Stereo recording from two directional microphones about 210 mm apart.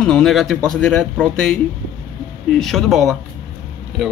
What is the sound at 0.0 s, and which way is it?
Speech, centre (ahead or behind).